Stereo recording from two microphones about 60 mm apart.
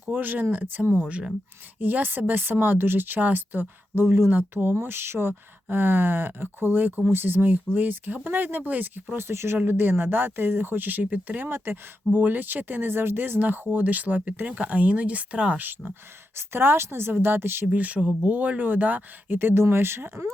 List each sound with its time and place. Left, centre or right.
0.1 s speech: right
16.3 s a woman's voice: right
17.7 s a woman's voice: right